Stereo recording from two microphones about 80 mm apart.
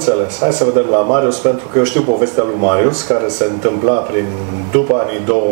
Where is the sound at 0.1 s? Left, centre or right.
Right.